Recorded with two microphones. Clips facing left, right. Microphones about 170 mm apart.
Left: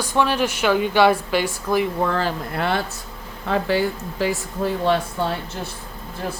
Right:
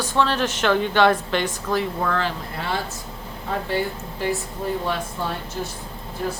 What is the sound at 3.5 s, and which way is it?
Speech, 90° left.